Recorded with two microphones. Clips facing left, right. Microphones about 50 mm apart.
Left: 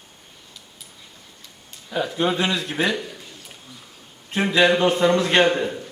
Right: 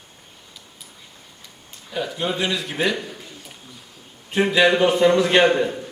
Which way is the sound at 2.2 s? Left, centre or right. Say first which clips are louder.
Left 1 dB; left.